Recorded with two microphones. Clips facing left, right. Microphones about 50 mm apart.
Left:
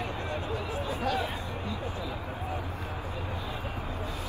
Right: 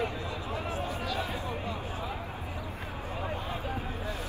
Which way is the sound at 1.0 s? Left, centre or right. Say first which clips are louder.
Left 4 dB; left.